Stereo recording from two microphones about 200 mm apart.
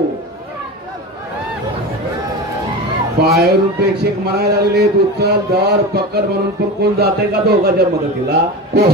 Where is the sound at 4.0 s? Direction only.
55° right (ahead or behind).